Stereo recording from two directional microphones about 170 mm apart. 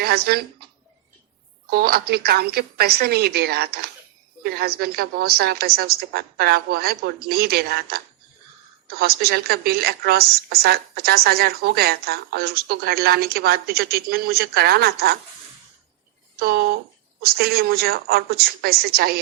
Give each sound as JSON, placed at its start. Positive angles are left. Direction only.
{"t": 0.0, "sound": "speech", "side_deg": -65}
{"t": 1.7, "sound": "a woman's voice", "side_deg": -65}
{"t": 16.4, "sound": "a woman's voice", "side_deg": -65}